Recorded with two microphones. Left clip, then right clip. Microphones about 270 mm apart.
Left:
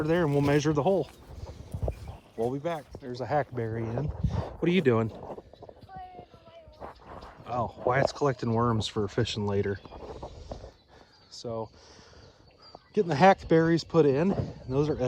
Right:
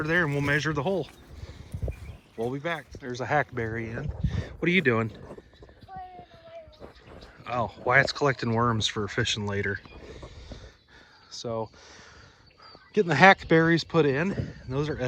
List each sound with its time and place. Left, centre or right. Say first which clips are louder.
0.0 s speech: even; centre
7.2 s speech: right 2 dB; centre
12.9 s speech: right 3 dB; centre